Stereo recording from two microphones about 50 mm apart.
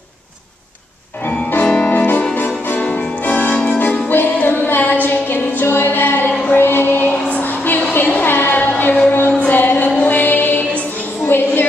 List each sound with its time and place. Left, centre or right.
1.2 s piano: left
1.9 s music: left
4.1 s music: left
7.9 s a sound: left
9.5 s music: left
11.2 s a sound: left